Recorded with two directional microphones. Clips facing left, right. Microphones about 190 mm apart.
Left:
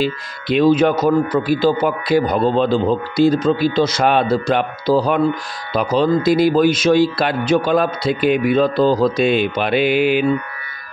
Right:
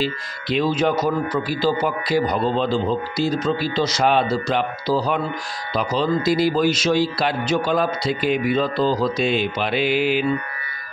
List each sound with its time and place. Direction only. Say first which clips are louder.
0.0 s speech: left 4 dB; 55° left (ahead or behind)